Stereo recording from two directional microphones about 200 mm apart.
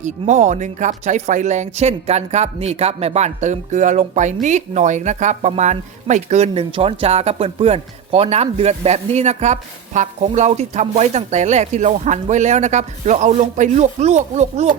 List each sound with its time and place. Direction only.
0.0 s speech: 35° right (ahead or behind)